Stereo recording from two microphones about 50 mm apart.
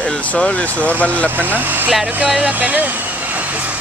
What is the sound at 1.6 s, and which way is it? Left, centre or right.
Speech, right.